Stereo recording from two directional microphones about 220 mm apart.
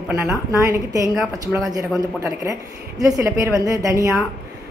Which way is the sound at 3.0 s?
15° right (ahead or behind).